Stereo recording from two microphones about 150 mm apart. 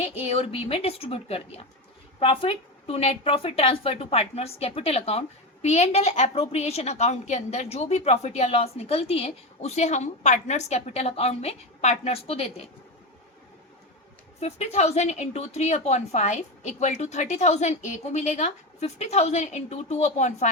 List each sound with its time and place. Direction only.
0.0 s a woman's voice: 45° left (ahead or behind)
14.3 s a woman's voice: 45° left (ahead or behind)